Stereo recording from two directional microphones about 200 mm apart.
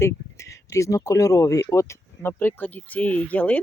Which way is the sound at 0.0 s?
15° left (ahead or behind).